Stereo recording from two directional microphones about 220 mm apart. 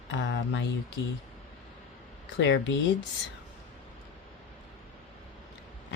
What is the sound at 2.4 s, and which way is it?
Speech, 55° left (ahead or behind).